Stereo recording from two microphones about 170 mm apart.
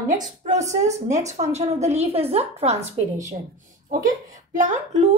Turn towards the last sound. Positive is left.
turn(degrees=-45)  # may be behind; listen again after turning